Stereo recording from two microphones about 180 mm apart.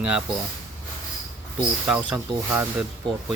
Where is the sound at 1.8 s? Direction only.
10° right (ahead or behind).